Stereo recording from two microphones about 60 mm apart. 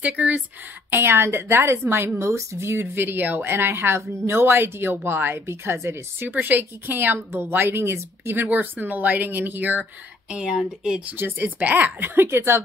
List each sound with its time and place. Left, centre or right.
0.0 s speech: right
0.8 s speech: right
2.1 s speech: right
8.5 s speech: right
10.3 s speech: centre
11.1 s speech: right